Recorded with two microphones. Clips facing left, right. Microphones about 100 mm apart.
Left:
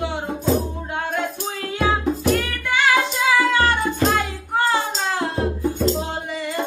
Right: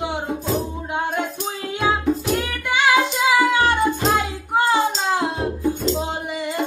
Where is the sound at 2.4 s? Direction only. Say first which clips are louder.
Even; 15° right (ahead or behind).